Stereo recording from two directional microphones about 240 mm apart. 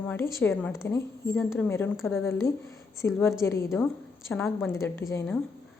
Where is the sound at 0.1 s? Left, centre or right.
Centre.